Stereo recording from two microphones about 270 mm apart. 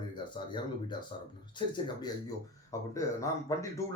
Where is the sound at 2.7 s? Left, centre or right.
Centre.